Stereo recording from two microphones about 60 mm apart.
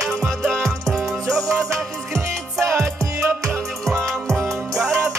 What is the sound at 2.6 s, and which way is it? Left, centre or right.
Music, right.